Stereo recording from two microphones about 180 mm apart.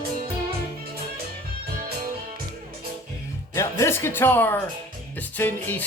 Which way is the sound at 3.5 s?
15° left (ahead or behind).